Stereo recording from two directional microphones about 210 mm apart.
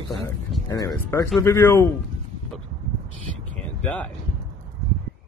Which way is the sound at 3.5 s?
5° left (ahead or behind).